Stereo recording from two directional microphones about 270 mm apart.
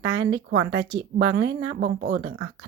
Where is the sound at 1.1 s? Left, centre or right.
Right.